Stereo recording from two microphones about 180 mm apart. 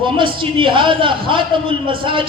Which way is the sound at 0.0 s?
25° right (ahead or behind).